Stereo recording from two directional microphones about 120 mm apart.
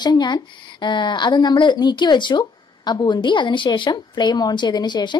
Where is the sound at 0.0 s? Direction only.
35° left (ahead or behind).